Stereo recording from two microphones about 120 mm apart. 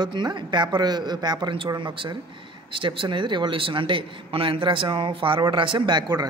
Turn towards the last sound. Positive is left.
turn(degrees=-35)  # may be behind; listen again after turning